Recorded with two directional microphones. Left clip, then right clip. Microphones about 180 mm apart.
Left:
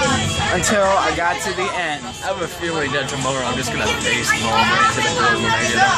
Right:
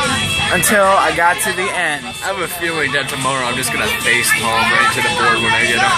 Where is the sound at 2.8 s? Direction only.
25° left (ahead or behind).